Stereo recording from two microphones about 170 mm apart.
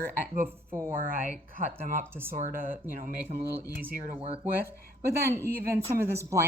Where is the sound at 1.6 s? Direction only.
50° right (ahead or behind).